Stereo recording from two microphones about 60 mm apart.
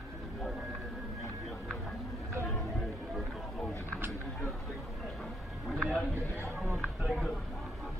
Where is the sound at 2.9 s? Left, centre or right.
Centre.